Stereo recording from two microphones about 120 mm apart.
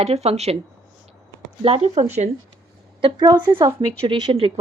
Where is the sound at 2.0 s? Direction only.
70° right (ahead or behind).